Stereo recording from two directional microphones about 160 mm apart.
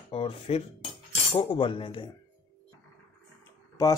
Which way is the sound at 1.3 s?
30° left (ahead or behind).